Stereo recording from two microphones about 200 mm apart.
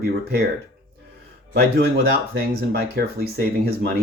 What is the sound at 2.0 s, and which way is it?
Speech, 50° right (ahead or behind).